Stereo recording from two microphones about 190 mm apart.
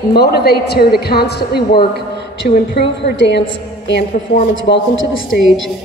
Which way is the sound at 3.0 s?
65° left (ahead or behind).